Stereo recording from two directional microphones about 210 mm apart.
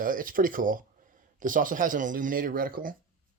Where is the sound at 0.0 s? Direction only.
40° right (ahead or behind).